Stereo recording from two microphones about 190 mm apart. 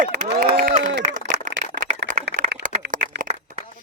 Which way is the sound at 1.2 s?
45° right (ahead or behind).